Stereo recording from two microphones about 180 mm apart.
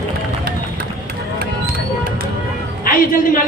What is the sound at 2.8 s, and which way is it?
Speech, 50° left (ahead or behind).